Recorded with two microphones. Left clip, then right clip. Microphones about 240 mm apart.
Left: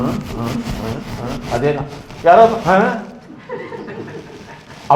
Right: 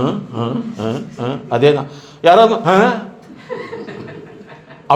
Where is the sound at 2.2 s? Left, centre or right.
Right.